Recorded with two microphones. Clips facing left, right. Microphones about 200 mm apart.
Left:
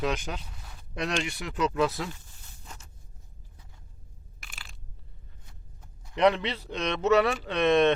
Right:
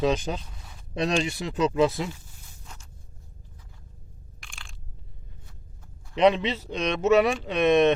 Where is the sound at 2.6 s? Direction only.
5° left (ahead or behind).